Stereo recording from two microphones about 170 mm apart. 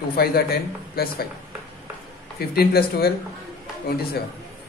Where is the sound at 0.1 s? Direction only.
65° left (ahead or behind).